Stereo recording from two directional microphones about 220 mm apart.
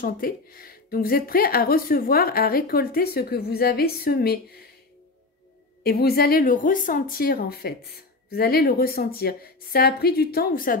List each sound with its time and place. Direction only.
0.0 s speech: 40° left (ahead or behind)
5.9 s speech: 45° left (ahead or behind)